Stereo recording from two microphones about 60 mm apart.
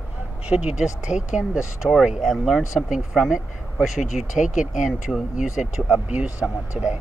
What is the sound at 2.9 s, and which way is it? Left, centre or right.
Speech, centre.